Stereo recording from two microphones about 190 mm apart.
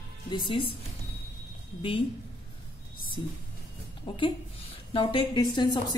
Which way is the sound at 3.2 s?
25° left (ahead or behind).